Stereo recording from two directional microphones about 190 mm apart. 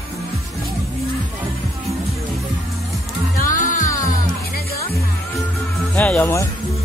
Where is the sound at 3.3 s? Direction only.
45° left (ahead or behind).